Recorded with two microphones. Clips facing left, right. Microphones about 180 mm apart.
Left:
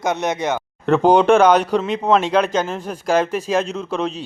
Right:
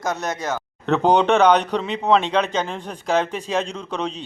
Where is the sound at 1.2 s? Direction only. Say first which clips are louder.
Left 3 dB; 10° left (ahead or behind).